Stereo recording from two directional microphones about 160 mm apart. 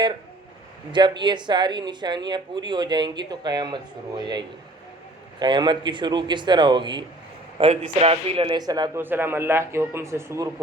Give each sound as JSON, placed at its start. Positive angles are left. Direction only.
{"t": 0.9, "sound": "speech", "side_deg": -30}
{"t": 5.4, "sound": "speech", "side_deg": -30}
{"t": 7.6, "sound": "a man's voice", "side_deg": -40}
{"t": 9.0, "sound": "a man's voice", "side_deg": -15}